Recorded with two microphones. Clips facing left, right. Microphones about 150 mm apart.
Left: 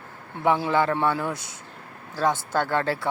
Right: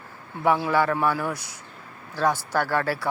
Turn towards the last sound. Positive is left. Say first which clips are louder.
# even
turn(degrees=20)  # may be behind; listen again after turning